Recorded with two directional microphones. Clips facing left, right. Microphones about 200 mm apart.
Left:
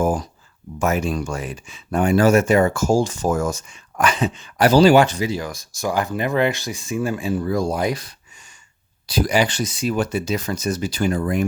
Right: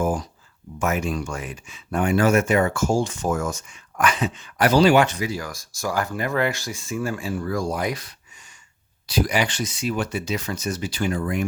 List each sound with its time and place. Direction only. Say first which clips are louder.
0.8 s speech: left 3 dB; 35° left (ahead or behind)